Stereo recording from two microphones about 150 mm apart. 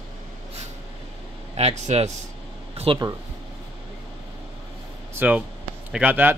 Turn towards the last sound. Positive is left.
turn(degrees=-10)  # may be behind; listen again after turning